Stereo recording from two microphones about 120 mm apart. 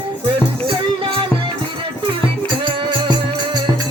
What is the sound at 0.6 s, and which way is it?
Music, 45° right (ahead or behind).